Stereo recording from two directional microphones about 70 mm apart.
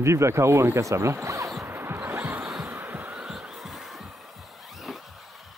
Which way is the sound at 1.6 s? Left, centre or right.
Right.